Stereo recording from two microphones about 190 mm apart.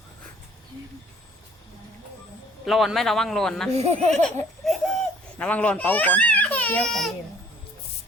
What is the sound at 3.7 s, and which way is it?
Speech, 35° right (ahead or behind).